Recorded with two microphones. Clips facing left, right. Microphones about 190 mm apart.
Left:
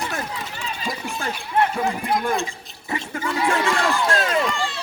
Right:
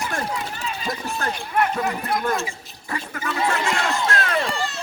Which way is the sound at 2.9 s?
25° left (ahead or behind).